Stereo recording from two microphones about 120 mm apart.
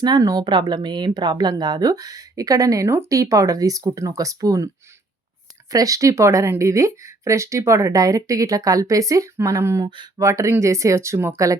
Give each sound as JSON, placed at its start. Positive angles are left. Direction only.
{"t": 0.0, "sound": "speech", "side_deg": -30}
{"t": 5.7, "sound": "speech", "side_deg": -30}